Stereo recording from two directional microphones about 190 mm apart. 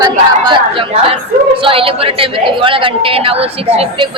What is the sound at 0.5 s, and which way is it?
A woman's voice, 25° right (ahead or behind).